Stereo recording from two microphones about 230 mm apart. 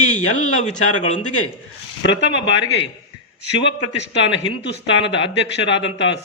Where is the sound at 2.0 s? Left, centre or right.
Left.